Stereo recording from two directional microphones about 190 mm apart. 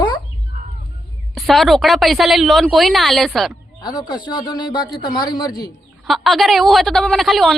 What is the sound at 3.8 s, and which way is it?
Speech, 25° left (ahead or behind).